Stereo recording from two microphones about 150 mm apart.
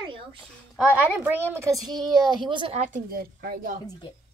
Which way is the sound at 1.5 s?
25° right (ahead or behind).